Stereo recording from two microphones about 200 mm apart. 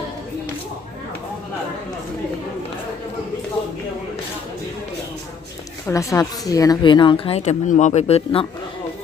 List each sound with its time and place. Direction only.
5.8 s a woman's voice: 15° left (ahead or behind)